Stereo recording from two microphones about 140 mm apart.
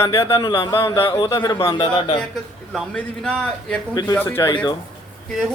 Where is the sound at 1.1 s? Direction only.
30° left (ahead or behind).